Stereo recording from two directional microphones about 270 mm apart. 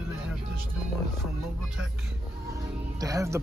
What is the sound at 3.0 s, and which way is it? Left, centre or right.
Speech, centre.